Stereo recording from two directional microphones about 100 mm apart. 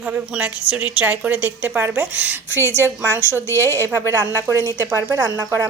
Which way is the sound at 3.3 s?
30° right (ahead or behind).